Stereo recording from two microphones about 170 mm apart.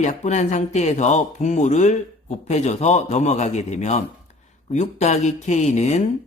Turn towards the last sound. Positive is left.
turn(degrees=40)  # may be behind; listen again after turning